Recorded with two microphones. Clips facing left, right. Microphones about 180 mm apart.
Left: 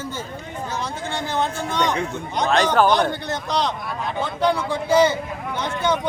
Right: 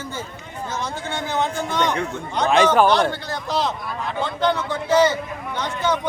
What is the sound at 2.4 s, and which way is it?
Speech, 10° right (ahead or behind).